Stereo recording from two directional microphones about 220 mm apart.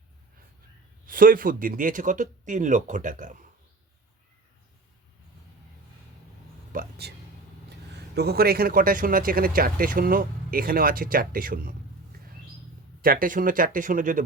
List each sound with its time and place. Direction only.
1.0 s speech: 40° right (ahead or behind)
6.7 s speech: 40° right (ahead or behind)
8.1 s speech: 45° right (ahead or behind)
12.1 s a sound: 45° right (ahead or behind)
13.0 s speech: 40° right (ahead or behind)